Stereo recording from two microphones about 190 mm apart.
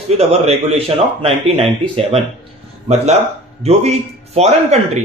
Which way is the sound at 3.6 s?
35° right (ahead or behind).